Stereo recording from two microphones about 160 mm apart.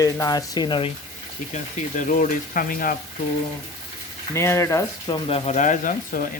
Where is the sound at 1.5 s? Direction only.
50° left (ahead or behind).